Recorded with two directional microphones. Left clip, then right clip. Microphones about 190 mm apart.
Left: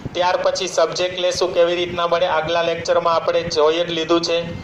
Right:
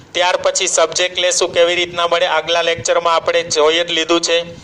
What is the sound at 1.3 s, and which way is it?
A man's voice, 55° right (ahead or behind).